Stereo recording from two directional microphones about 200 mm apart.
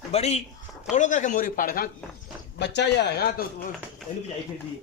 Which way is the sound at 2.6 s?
60° left (ahead or behind).